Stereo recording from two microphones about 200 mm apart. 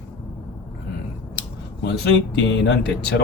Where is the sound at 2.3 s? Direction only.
65° left (ahead or behind).